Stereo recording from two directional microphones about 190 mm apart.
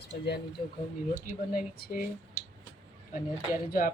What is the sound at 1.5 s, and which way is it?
Speech, 50° left (ahead or behind).